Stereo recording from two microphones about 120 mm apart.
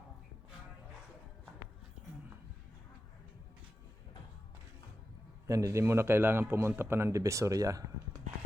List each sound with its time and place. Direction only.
5.5 s a man's voice: 25° right (ahead or behind)